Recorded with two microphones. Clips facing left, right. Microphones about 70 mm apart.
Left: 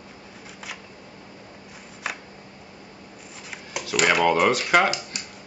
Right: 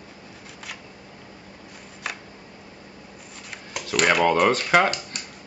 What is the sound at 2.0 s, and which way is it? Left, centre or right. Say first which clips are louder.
Camera: left 1 dB; centre.